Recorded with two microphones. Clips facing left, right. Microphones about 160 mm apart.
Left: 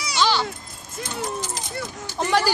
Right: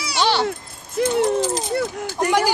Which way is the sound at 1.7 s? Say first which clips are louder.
Right 9 dB; 65° right (ahead or behind).